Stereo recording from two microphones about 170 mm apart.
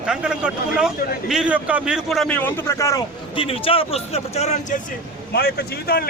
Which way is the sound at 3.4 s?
35° left (ahead or behind).